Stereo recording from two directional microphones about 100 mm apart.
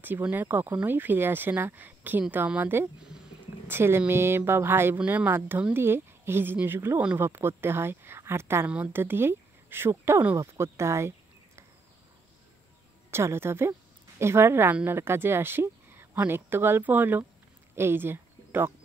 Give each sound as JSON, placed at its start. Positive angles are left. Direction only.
{"t": 0.0, "sound": "speech", "side_deg": -20}
{"t": 13.1, "sound": "speech", "side_deg": -25}
{"t": 17.7, "sound": "a sound", "side_deg": -25}